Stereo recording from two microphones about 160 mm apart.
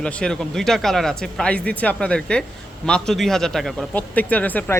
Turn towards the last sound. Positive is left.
turn(degrees=10)  # may be behind; listen again after turning